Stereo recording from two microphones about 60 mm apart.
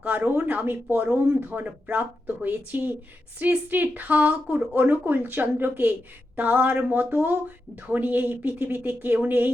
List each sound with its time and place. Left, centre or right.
0.2 s speech: right